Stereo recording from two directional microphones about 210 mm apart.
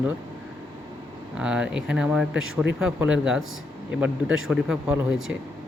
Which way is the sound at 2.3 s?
65° right (ahead or behind).